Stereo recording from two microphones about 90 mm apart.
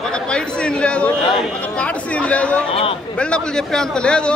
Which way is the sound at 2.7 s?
90° left.